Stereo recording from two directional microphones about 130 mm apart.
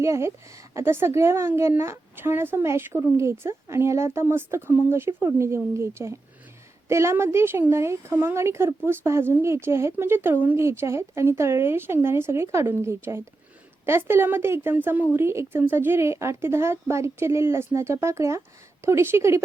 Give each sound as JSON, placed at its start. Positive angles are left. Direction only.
{"t": 0.0, "sound": "a woman's voice", "side_deg": -20}